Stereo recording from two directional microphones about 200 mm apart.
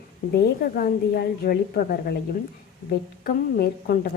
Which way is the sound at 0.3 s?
50° left (ahead or behind).